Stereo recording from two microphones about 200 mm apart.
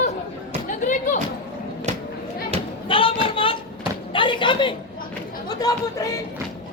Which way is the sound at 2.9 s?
25° left (ahead or behind).